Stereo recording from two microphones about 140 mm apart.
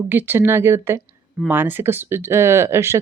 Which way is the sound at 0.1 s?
15° right (ahead or behind).